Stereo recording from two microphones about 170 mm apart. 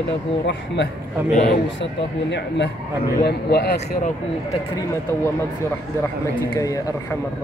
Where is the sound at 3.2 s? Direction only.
75° left (ahead or behind).